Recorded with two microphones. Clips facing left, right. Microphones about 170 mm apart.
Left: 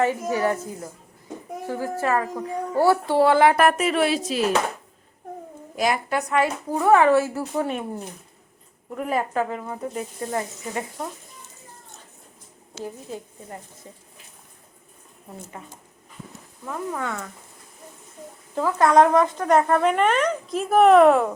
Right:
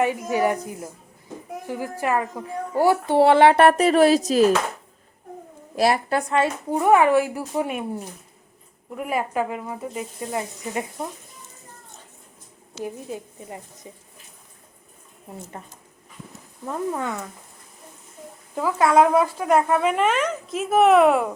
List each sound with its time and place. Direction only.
0.0 s a woman's voice: 15° right (ahead or behind); by 4.5 s 40° right (ahead or behind)
5.7 s a woman's voice: 35° right (ahead or behind); by 10.8 s 15° right (ahead or behind)
12.8 s speech: 15° right (ahead or behind)
16.6 s a woman's voice: 20° right (ahead or behind)
18.5 s speech: 5° right (ahead or behind)